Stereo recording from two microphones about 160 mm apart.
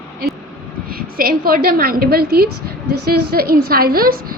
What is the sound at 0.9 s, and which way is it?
A woman's voice, 65° right (ahead or behind).